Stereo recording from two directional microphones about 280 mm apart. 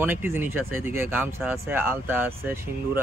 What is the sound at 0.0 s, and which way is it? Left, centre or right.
Speech, centre.